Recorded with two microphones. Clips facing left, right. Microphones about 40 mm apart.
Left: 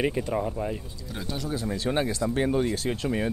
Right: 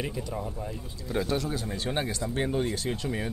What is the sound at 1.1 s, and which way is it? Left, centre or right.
Speech, centre.